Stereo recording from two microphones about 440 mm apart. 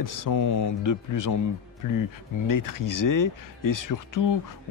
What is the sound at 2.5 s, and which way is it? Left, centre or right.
Speech, left.